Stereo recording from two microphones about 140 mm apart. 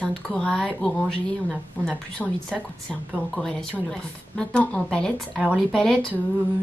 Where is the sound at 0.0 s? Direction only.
5° left (ahead or behind).